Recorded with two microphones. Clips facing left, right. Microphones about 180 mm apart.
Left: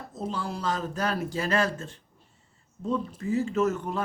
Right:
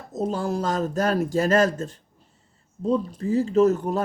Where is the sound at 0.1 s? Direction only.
45° right (ahead or behind).